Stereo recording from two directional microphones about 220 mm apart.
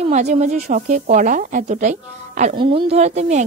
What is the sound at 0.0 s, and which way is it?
A woman's voice, 30° right (ahead or behind).